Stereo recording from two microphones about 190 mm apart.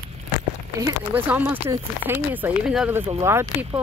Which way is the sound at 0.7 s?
15° right (ahead or behind).